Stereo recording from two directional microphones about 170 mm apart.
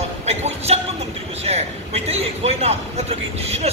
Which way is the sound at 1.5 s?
40° right (ahead or behind).